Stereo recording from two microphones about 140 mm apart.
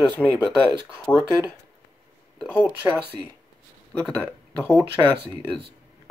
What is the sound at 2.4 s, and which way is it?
Speech, 10° right (ahead or behind).